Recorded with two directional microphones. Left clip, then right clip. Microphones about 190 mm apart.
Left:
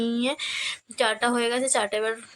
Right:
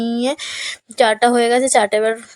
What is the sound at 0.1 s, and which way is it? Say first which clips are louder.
A woman's voice: right 6 dB; 30° right (ahead or behind).